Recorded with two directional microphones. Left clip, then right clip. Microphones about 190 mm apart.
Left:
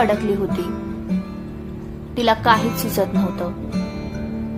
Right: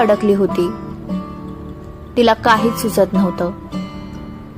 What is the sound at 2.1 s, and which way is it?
A woman's voice, 25° right (ahead or behind).